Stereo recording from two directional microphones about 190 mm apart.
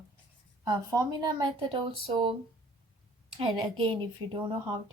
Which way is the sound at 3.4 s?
25° right (ahead or behind).